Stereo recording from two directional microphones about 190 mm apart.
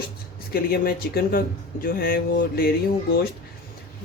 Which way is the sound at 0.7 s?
55° left (ahead or behind).